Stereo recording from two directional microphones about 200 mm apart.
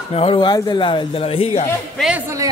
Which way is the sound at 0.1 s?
30° left (ahead or behind).